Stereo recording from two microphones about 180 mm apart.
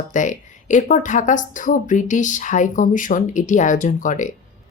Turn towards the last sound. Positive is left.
turn(degrees=45)  # may be behind; listen again after turning